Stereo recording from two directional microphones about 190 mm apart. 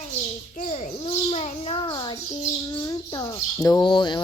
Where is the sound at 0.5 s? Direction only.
35° left (ahead or behind).